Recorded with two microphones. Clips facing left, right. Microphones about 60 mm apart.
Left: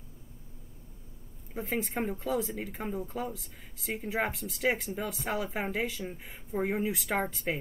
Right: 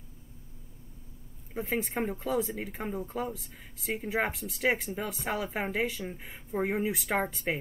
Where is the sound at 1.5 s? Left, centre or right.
Centre.